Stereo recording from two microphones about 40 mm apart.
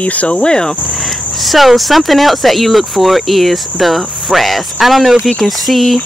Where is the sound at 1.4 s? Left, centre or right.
Centre.